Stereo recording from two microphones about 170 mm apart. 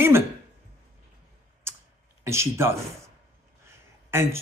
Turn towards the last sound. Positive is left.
turn(degrees=-15)  # may be behind; listen again after turning